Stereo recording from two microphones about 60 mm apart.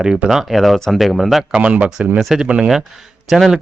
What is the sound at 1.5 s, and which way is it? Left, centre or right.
Speech, right.